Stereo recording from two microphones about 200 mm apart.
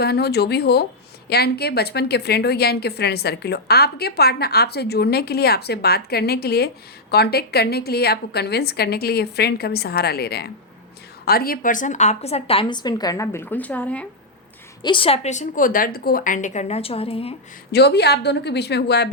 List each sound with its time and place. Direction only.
0.0 s a woman's voice: 55° left (ahead or behind); by 14.1 s 5° left (ahead or behind)
14.8 s a woman's voice: 25° left (ahead or behind)
17.7 s a woman's voice: 55° left (ahead or behind)